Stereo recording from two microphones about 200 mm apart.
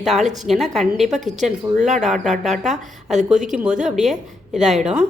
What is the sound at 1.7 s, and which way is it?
Speech, 35° right (ahead or behind).